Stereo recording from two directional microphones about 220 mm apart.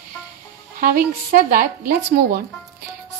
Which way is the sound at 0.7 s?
40° right (ahead or behind).